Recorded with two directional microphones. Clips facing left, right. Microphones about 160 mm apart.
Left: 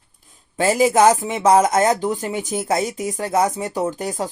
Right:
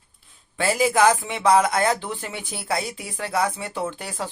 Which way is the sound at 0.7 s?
40° left (ahead or behind).